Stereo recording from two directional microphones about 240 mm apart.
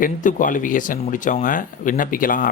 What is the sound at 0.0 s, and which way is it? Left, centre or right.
Speech, left.